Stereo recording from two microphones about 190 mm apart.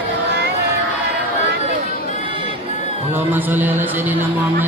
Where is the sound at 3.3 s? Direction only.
10° right (ahead or behind).